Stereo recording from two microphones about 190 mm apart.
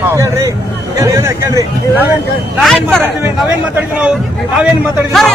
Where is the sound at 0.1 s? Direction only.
15° right (ahead or behind).